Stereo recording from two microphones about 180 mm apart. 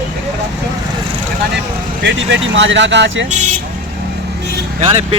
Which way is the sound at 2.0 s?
85° right.